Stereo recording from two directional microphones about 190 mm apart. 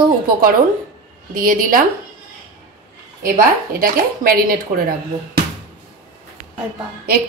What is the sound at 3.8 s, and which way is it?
A woman's voice, 50° right (ahead or behind).